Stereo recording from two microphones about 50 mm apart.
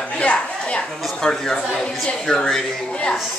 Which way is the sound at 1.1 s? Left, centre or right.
Centre.